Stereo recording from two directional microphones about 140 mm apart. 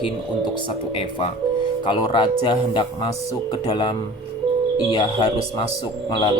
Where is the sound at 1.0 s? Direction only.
40° left (ahead or behind).